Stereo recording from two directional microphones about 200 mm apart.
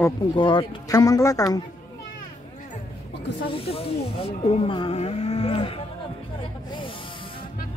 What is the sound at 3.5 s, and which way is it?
Speech, 30° left (ahead or behind).